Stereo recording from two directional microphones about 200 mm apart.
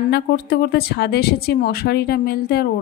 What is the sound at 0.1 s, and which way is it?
A woman's voice, 50° left (ahead or behind).